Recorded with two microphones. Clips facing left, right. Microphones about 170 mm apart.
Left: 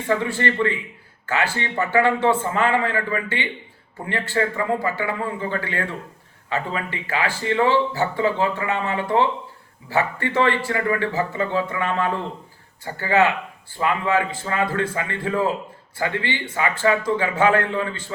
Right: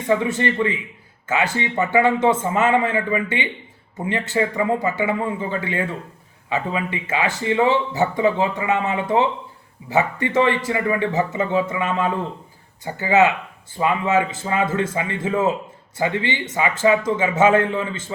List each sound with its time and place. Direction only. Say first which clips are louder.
0.1 s speech: right 3 dB; 20° right (ahead or behind)